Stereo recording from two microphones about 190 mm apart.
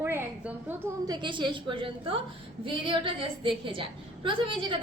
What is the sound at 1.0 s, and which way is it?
A woman's voice, 25° right (ahead or behind).